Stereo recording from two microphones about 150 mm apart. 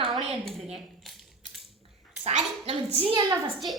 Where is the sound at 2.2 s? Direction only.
45° right (ahead or behind).